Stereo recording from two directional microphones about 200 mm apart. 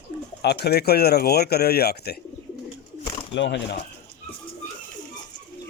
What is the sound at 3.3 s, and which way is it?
Speech, 65° left (ahead or behind).